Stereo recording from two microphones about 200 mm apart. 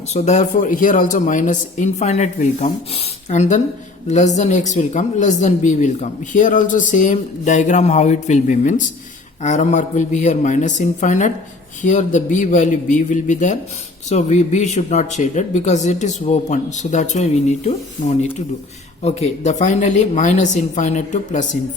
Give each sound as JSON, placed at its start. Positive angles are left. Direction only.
{"t": 0.1, "sound": "a woman's voice", "side_deg": 35}